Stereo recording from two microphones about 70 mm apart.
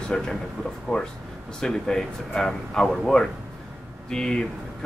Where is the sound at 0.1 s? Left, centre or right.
Centre.